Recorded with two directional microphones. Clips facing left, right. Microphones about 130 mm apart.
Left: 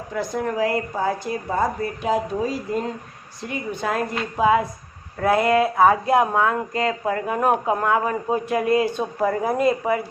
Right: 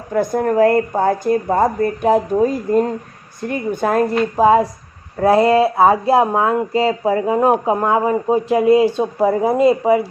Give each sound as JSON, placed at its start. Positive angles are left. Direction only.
{"t": 0.1, "sound": "speech", "side_deg": -50}